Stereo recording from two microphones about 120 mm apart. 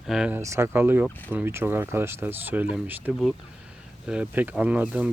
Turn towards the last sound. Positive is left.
turn(degrees=-10)  # may be behind; listen again after turning